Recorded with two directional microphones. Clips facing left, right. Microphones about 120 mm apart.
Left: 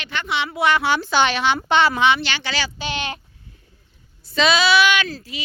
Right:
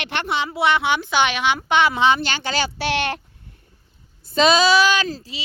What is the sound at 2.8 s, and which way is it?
Speech, 70° right (ahead or behind).